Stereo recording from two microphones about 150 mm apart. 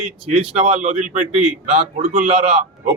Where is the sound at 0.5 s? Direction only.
45° right (ahead or behind).